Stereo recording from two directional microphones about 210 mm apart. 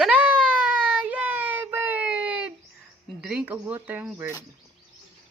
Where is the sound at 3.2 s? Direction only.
5° right (ahead or behind).